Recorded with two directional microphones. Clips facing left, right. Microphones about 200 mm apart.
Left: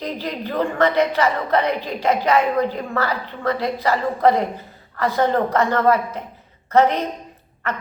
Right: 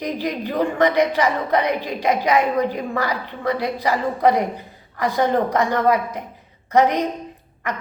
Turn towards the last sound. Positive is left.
turn(degrees=-15)  # may be behind; listen again after turning